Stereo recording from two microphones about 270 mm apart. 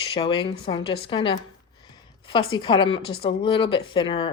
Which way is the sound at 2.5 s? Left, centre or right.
Centre.